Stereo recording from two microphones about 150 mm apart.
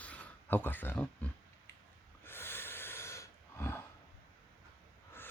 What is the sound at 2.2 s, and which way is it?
Snort, 15° left (ahead or behind).